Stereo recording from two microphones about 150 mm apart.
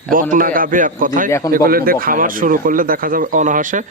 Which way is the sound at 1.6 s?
80° right.